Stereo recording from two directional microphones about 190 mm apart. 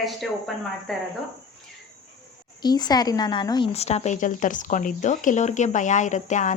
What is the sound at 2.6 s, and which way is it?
Speech, 20° left (ahead or behind).